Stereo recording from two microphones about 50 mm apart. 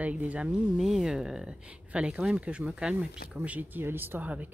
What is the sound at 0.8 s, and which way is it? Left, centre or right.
Speech, centre.